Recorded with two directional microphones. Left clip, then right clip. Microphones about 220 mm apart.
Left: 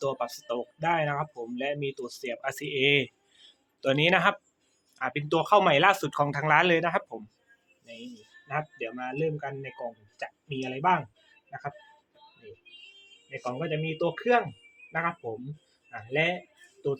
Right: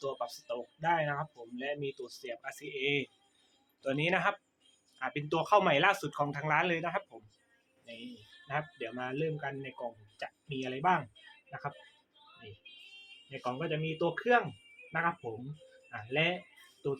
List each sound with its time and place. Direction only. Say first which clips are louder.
0.0 s speech: left 7 dB; 25° left (ahead or behind)
8.4 s speech: left 4 dB; 15° left (ahead or behind)
13.4 s speech: left 4 dB; 15° left (ahead or behind)
15.9 s speech: left 4 dB; 15° left (ahead or behind)